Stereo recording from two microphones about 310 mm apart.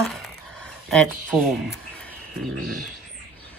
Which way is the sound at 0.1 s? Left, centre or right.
Centre.